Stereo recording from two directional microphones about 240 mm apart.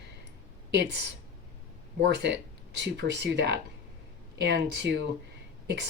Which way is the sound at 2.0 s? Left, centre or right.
Right.